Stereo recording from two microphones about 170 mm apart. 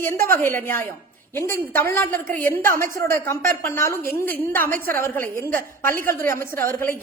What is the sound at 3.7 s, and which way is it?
A woman's voice, 15° left (ahead or behind).